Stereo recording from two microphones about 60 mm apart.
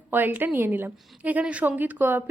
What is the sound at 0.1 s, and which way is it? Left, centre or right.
A woman's voice, right.